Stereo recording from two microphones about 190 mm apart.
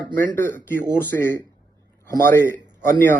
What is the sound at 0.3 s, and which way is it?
A man's voice, 10° left (ahead or behind).